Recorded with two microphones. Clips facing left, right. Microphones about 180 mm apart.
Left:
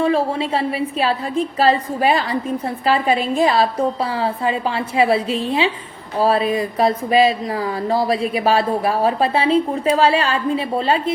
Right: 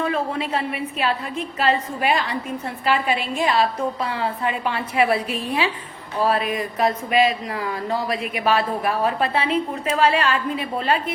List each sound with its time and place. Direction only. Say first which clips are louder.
0.0 s a woman's voice: left 6 dB; 30° left (ahead or behind)